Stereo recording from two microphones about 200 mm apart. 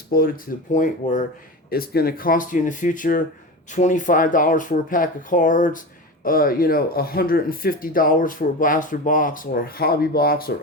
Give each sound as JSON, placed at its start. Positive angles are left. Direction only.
{"t": 0.1, "sound": "speech", "side_deg": 45}
{"t": 1.7, "sound": "speech", "side_deg": 50}